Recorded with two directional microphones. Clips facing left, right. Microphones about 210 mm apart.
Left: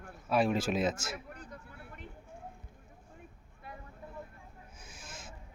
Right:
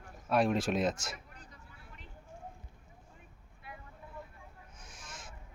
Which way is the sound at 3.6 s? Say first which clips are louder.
Left 2 dB; 40° left (ahead or behind).